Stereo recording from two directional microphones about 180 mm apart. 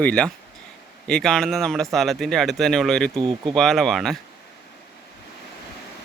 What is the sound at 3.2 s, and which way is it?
Speech, 25° right (ahead or behind).